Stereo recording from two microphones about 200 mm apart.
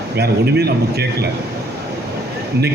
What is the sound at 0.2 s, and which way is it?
Speech, 55° right (ahead or behind).